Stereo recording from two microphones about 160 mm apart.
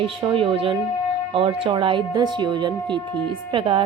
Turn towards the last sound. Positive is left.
turn(degrees=-30)  # may be behind; listen again after turning